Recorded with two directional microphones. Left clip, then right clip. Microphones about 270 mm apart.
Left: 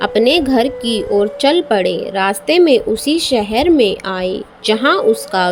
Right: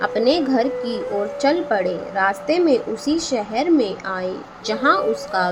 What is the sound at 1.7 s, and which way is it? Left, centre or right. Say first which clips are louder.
A woman's voice: left 5 dB; left.